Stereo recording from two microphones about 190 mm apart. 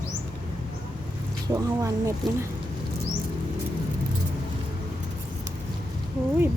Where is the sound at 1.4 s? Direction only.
20° right (ahead or behind).